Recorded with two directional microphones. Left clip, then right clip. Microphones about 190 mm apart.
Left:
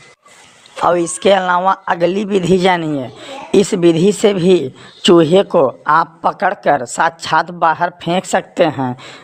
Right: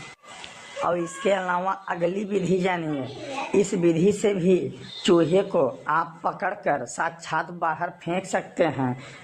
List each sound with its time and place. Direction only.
0.8 s speech: 35° left (ahead or behind)